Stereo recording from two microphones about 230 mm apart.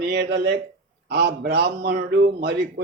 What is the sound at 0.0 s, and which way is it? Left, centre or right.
A man's voice, right.